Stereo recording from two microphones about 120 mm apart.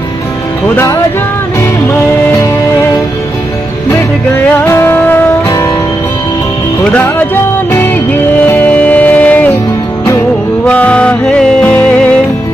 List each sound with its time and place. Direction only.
4.6 s music: 20° left (ahead or behind)
6.8 s music: 15° left (ahead or behind)
8.5 s music: 15° left (ahead or behind)
10.6 s music: 10° left (ahead or behind)